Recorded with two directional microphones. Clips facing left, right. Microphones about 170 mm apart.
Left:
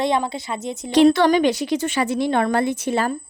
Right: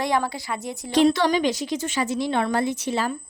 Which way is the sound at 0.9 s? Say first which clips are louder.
Left 5 dB; 60° left (ahead or behind).